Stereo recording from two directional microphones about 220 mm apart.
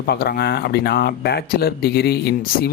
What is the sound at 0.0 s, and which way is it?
Speech, 45° left (ahead or behind).